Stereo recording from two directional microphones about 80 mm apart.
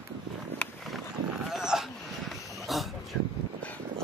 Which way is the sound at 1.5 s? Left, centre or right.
Centre.